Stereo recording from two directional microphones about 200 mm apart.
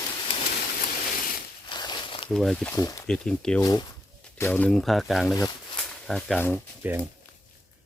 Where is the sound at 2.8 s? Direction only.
15° left (ahead or behind).